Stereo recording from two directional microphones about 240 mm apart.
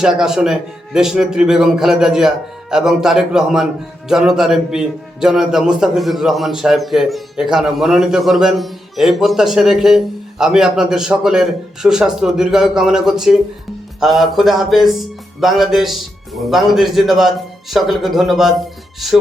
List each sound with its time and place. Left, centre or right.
0.0 s a man's voice: centre